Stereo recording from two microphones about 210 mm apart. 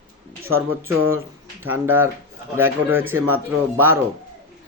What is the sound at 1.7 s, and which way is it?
Speech, 10° right (ahead or behind).